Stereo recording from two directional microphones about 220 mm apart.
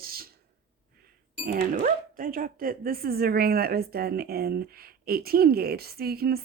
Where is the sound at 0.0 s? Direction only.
40° right (ahead or behind).